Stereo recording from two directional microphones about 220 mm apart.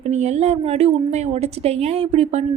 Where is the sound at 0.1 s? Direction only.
30° right (ahead or behind).